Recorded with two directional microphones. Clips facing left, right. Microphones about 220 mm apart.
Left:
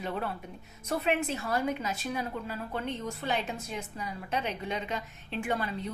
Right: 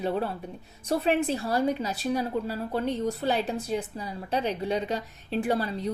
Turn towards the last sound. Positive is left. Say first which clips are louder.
# right 5 dB
turn(degrees=-35)  # may be behind; listen again after turning